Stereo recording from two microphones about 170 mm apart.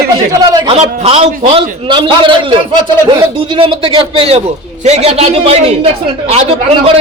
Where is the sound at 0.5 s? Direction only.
30° right (ahead or behind).